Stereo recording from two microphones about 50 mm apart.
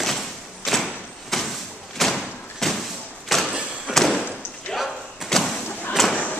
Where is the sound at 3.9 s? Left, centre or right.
Centre.